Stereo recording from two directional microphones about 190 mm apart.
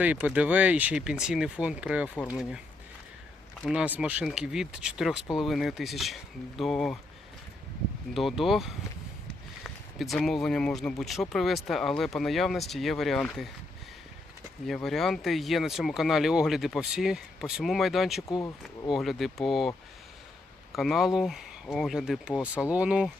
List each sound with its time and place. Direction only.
0.0 s speech: 10° right (ahead or behind)
3.6 s speech: 5° right (ahead or behind)
8.1 s speech: centre (ahead or behind)
10.0 s speech: centre (ahead or behind)
14.7 s speech: centre (ahead or behind)
18.3 s speech: 20° left (ahead or behind)
18.6 s speech: centre (ahead or behind)
20.7 s speech: centre (ahead or behind)